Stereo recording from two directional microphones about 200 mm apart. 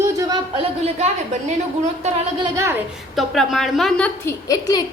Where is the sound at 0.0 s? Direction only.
20° right (ahead or behind).